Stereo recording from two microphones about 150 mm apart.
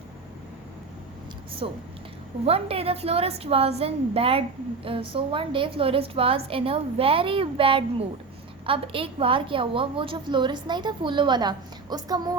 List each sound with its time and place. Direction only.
1.6 s a woman's voice: 40° right (ahead or behind)